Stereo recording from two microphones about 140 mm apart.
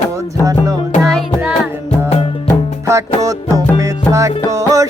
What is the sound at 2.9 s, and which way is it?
Music, 20° right (ahead or behind).